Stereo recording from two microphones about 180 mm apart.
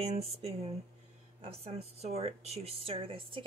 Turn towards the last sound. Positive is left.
turn(degrees=-30)  # may be behind; listen again after turning